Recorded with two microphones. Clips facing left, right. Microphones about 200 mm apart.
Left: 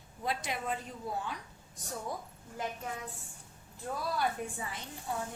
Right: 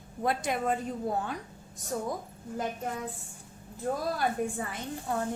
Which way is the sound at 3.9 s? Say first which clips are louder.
Right 4 dB; 45° right (ahead or behind).